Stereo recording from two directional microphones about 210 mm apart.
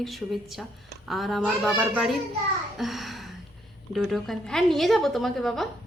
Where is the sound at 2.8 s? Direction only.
Centre (ahead or behind).